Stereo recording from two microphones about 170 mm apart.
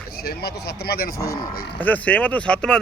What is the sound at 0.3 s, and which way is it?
Speech, 65° left (ahead or behind).